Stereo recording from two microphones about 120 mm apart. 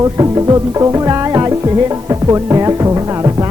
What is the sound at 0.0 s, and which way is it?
Music, 30° right (ahead or behind).